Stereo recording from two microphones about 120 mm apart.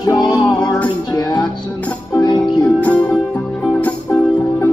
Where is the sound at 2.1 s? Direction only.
35° left (ahead or behind).